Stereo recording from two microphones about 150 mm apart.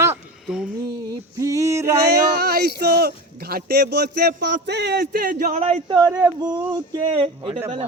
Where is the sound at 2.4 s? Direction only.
90° right; by 5.9 s 45° right (ahead or behind).